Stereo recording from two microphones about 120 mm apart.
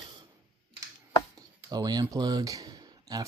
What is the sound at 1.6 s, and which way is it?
Speech, 35° right (ahead or behind).